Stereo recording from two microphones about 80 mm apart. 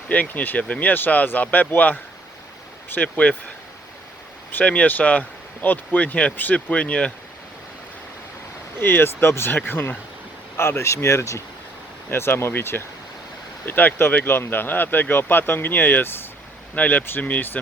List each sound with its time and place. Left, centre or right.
0.1 s speech: centre
4.5 s speech: centre
8.8 s speech: left